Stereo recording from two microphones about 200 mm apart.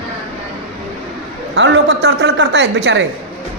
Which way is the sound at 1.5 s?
60° right (ahead or behind).